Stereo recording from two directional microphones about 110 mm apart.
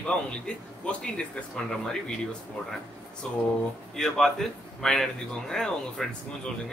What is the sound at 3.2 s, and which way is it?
A man's voice, 10° left (ahead or behind).